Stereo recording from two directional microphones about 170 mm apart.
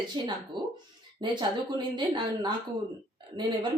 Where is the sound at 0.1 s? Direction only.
25° right (ahead or behind).